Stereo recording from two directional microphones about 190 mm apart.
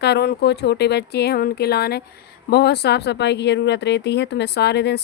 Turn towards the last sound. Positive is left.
turn(degrees=60)  # may be behind; listen again after turning